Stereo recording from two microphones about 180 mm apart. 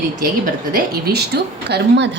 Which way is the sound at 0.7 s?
60° right (ahead or behind).